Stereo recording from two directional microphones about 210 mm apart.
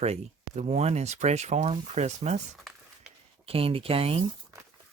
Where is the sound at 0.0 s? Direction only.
30° right (ahead or behind).